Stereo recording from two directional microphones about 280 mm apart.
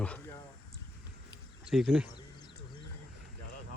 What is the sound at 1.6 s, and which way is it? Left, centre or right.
Speech, centre.